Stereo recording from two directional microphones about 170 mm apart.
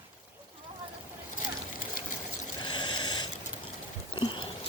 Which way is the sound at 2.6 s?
25° left (ahead or behind).